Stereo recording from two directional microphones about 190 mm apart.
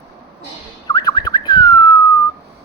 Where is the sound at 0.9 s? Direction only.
20° left (ahead or behind).